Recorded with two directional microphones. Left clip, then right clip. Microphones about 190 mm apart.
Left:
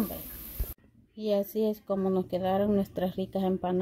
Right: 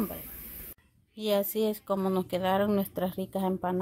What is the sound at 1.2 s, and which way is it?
Speech, centre (ahead or behind).